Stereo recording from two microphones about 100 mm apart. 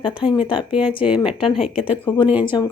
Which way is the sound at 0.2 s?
60° left (ahead or behind).